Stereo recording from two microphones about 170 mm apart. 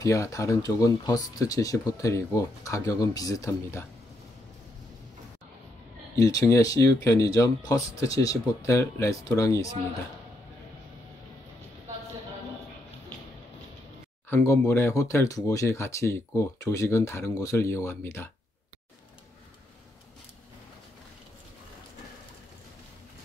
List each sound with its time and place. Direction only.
0.0 s speech: 20° left (ahead or behind)
6.1 s speech: 20° left (ahead or behind)
14.3 s speech: 15° left (ahead or behind)